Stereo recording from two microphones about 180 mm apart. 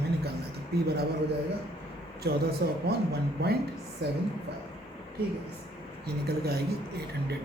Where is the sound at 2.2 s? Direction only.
65° right (ahead or behind).